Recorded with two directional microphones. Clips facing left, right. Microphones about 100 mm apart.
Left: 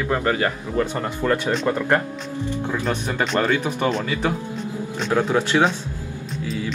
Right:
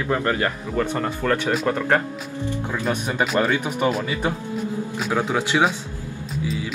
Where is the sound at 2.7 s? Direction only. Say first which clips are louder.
Right 1 dB; 10° right (ahead or behind).